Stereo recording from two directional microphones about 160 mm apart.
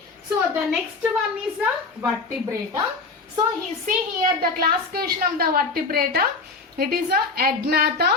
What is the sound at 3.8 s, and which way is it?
A woman's voice, 60° right (ahead or behind).